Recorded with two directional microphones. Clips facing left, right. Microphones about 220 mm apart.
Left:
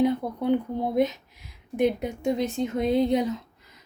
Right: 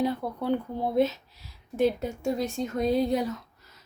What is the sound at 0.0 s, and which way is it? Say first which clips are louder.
Speech: left 4 dB; 20° left (ahead or behind).